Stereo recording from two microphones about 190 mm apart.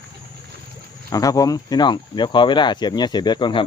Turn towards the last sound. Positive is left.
turn(degrees=25)  # may be behind; listen again after turning